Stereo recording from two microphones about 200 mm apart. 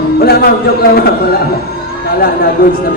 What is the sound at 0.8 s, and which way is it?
Speech, 50° left (ahead or behind).